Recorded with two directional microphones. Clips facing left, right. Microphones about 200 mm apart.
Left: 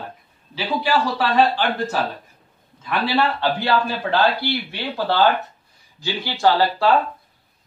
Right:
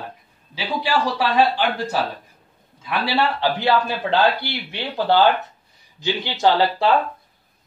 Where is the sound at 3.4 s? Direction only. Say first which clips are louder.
Right 1 dB; 20° right (ahead or behind).